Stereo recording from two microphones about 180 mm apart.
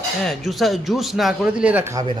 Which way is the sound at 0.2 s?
Centre (ahead or behind).